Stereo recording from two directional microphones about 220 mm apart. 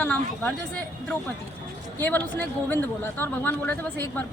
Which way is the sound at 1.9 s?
10° left (ahead or behind).